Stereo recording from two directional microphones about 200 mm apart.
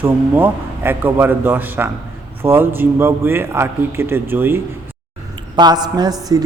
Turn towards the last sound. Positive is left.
turn(degrees=-20)  # may be behind; listen again after turning